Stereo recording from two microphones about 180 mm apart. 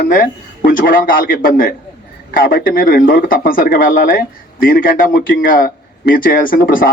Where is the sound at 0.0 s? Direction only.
50° left (ahead or behind).